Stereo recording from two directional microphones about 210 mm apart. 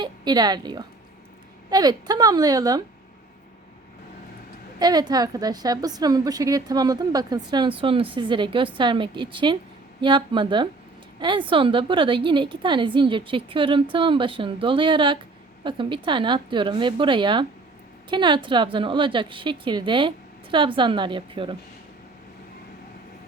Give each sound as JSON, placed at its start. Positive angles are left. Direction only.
{"t": 0.0, "sound": "a woman's voice", "side_deg": -20}
{"t": 4.8, "sound": "a woman's voice", "side_deg": -20}